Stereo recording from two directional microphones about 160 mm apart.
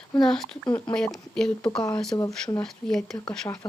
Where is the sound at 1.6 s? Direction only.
25° left (ahead or behind).